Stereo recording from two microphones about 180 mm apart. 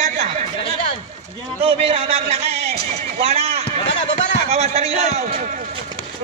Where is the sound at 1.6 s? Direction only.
35° right (ahead or behind).